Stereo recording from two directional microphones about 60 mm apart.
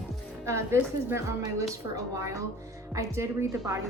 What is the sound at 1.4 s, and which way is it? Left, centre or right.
A woman's voice, right.